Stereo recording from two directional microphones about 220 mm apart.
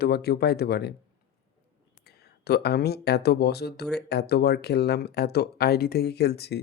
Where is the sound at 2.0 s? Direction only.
45° left (ahead or behind).